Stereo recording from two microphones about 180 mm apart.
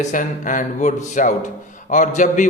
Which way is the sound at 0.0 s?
45° left (ahead or behind).